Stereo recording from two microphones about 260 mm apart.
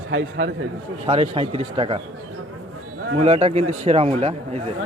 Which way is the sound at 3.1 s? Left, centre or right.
Right.